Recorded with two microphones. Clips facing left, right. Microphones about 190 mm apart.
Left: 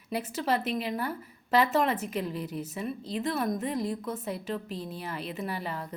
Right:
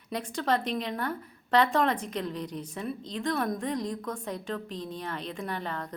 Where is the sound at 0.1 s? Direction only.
5° left (ahead or behind).